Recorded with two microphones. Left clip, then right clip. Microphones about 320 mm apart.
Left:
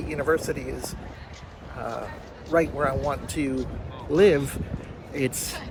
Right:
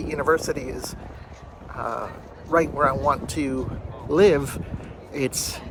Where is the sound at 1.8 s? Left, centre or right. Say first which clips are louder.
Right 4 dB; centre.